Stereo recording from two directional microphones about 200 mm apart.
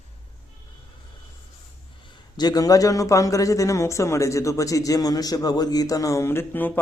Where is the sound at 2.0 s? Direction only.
20° left (ahead or behind).